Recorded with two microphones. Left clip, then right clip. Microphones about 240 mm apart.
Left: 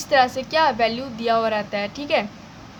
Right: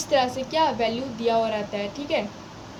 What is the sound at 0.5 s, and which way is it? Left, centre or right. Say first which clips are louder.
A woman's voice: left 3 dB; left.